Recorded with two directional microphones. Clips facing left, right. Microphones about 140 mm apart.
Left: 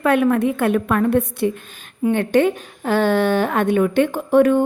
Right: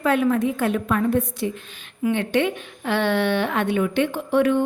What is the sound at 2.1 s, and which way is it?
A woman's voice, 45° left (ahead or behind).